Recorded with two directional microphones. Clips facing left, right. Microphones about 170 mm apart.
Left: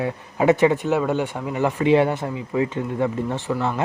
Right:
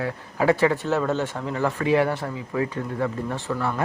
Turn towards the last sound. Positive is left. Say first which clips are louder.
# left 3 dB
turn(degrees=20)  # may be behind; listen again after turning